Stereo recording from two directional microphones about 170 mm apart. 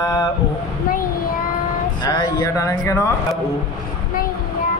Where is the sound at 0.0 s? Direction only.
20° left (ahead or behind).